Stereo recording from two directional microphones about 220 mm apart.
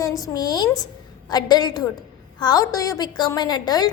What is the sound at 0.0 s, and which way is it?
A woman's voice, 15° left (ahead or behind).